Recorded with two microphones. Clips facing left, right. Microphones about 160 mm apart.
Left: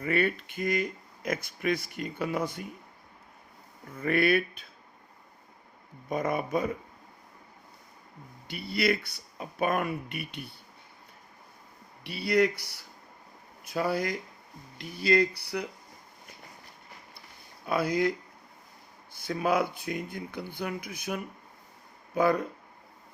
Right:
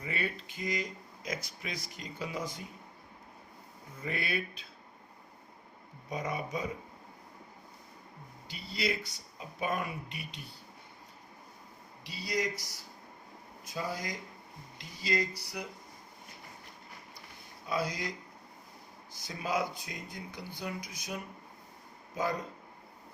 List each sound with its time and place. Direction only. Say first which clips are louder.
0.0 s speech: left 9 dB; 60° left (ahead or behind)
3.9 s speech: left 11 dB; 60° left (ahead or behind)
6.1 s speech: left 7 dB; 55° left (ahead or behind)
8.4 s speech: left 7 dB; 60° left (ahead or behind)
12.0 s speech: left 9 dB; 60° left (ahead or behind)
17.7 s speech: left 8 dB; 60° left (ahead or behind)
19.1 s speech: left 7 dB; 55° left (ahead or behind)